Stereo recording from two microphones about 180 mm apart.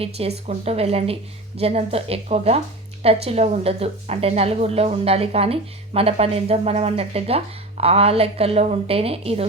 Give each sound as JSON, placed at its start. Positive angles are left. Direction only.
{"t": 0.0, "sound": "a woman's voice", "side_deg": -35}